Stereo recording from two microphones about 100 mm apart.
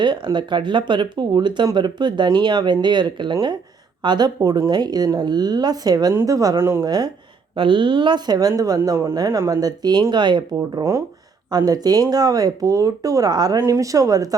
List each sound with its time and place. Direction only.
0.0 s speech: 50° right (ahead or behind); by 6.8 s 25° right (ahead or behind)
6.8 s speech: 45° right (ahead or behind)
7.5 s speech: 55° right (ahead or behind)
11.5 s speech: 40° right (ahead or behind)